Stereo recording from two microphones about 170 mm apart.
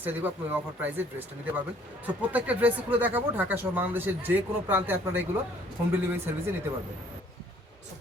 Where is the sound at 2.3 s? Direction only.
10° right (ahead or behind).